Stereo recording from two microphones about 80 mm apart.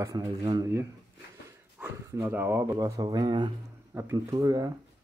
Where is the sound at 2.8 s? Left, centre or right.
Right.